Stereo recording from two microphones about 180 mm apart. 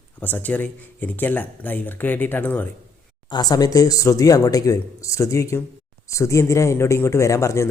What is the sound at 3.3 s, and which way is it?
Speech, 20° left (ahead or behind).